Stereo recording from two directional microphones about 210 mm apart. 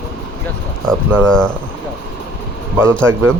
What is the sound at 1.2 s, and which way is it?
Speech, 5° left (ahead or behind).